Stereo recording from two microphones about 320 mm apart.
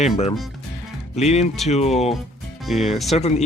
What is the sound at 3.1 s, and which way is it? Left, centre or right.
Speech, centre.